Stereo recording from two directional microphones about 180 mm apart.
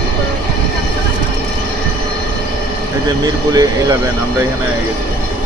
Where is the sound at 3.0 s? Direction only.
20° right (ahead or behind).